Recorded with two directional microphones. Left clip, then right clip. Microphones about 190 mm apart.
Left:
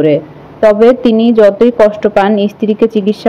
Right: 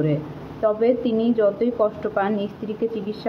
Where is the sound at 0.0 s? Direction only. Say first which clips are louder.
Left 14 dB; 35° left (ahead or behind).